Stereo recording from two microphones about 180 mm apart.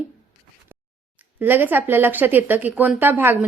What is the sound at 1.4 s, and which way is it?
Speech, 10° right (ahead or behind).